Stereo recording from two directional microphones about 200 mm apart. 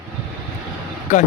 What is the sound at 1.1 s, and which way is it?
Speech, 35° left (ahead or behind).